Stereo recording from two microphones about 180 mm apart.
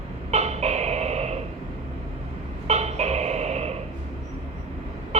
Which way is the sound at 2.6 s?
35° right (ahead or behind).